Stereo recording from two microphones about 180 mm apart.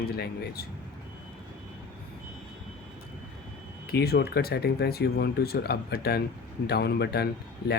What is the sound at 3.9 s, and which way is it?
Speech, 60° left (ahead or behind).